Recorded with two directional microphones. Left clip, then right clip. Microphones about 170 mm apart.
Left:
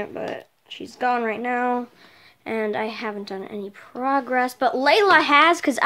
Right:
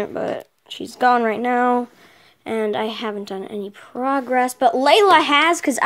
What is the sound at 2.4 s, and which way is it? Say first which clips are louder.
A woman's voice: right 3 dB; 15° right (ahead or behind).